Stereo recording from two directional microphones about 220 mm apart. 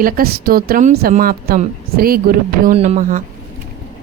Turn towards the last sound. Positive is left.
turn(degrees=-30)  # may be behind; listen again after turning